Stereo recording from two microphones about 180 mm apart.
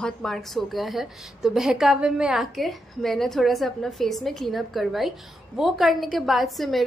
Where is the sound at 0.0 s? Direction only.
Centre (ahead or behind).